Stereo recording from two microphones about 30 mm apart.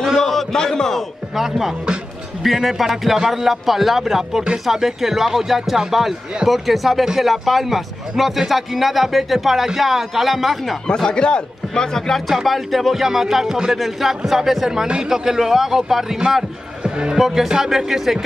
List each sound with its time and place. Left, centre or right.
0.2 s a sound: centre
0.6 s a man's voice: left
1.3 s a man's voice: centre
11.1 s speech: left
12.4 s speech: centre; by 13.7 s right
13.7 s speech: centre
16.8 s music: right
17.2 s a man's voice: centre
17.5 s speech: centre